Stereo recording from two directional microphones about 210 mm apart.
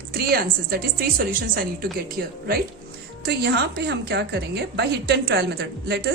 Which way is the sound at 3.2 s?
50° right (ahead or behind).